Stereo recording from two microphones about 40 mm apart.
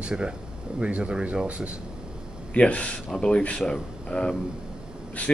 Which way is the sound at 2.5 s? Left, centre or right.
Left.